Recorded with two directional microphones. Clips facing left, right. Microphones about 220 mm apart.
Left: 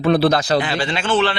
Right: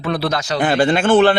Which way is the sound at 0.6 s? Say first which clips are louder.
Right 5 dB; 50° right (ahead or behind).